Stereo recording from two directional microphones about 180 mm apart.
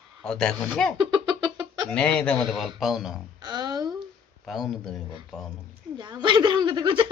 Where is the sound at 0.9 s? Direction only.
25° right (ahead or behind).